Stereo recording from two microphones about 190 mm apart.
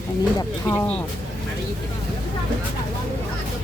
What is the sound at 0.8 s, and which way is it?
Speech, 5° left (ahead or behind).